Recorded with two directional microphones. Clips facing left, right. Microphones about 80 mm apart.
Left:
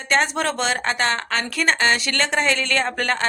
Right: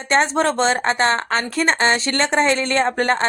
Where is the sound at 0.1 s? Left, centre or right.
Right.